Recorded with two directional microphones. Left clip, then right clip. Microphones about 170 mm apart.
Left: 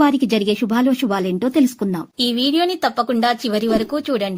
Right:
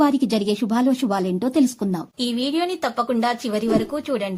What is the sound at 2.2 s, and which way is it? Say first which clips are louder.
Speech: left 6 dB; 25° left (ahead or behind).